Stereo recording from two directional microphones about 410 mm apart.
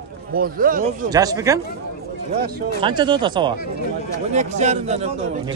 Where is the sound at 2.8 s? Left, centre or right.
Centre.